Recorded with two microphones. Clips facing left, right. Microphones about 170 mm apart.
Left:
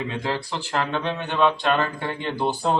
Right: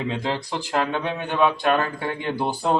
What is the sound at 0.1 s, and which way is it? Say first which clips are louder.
Speech: right 1 dB; 20° right (ahead or behind).